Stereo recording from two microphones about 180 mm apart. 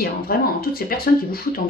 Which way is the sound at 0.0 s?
55° left (ahead or behind).